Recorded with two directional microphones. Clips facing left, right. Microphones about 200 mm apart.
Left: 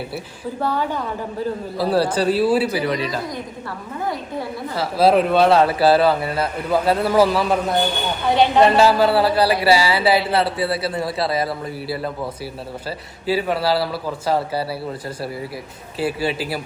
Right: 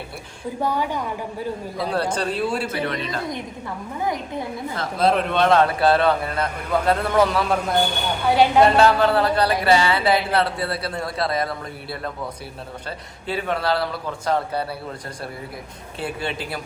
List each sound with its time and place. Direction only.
0.6 s a woman's voice: 15° right (ahead or behind)
1.8 s a man's voice: 5° left (ahead or behind)
4.0 s a woman's voice: 15° right (ahead or behind)
4.7 s a man's voice: 5° left (ahead or behind)
8.3 s a woman's voice: 10° right (ahead or behind)
8.6 s a man's voice: 5° left (ahead or behind)
13.2 s a man's voice: 5° left (ahead or behind)
16.0 s a man's voice: 5° left (ahead or behind)